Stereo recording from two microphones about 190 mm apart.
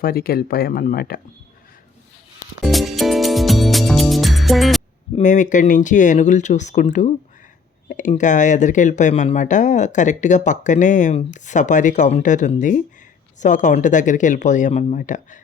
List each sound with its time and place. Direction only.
0.0 s speech: 50° left (ahead or behind)
2.6 s music: centre (ahead or behind)
5.1 s speech: 40° left (ahead or behind)
7.9 s speech: 40° left (ahead or behind)